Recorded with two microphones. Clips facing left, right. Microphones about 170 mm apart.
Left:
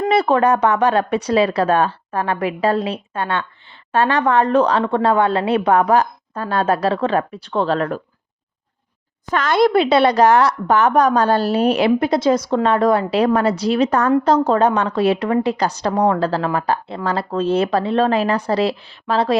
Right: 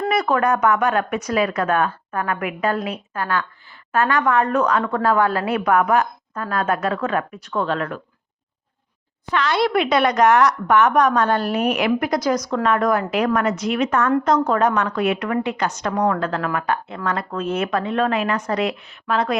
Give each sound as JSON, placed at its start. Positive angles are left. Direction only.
{"t": 0.1, "sound": "a woman's voice", "side_deg": 30}
{"t": 9.3, "sound": "speech", "side_deg": 45}
{"t": 9.7, "sound": "a woman's voice", "side_deg": 30}